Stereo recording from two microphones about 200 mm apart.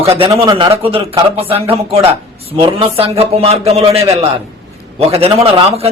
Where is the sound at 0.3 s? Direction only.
25° right (ahead or behind).